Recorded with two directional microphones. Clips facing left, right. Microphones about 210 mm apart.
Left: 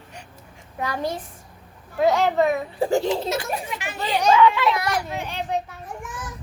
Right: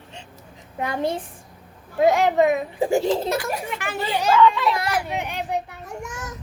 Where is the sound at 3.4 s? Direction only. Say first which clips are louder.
Right 1 dB; 60° right (ahead or behind).